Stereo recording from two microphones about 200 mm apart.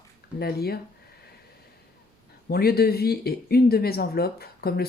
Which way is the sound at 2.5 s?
50° left (ahead or behind).